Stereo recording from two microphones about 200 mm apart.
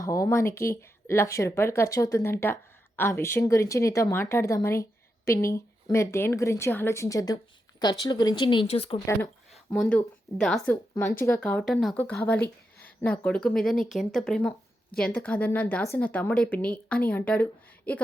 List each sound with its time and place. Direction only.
0.0 s speech: 15° left (ahead or behind)
9.5 s a sound: centre (ahead or behind)
10.3 s speech: 5° left (ahead or behind)